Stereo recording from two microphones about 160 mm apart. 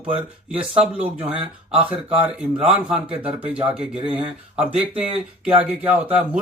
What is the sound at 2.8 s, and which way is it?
Speech, 10° right (ahead or behind).